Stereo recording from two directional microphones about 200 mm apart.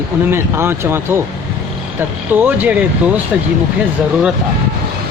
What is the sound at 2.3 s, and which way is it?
Speech, 10° right (ahead or behind).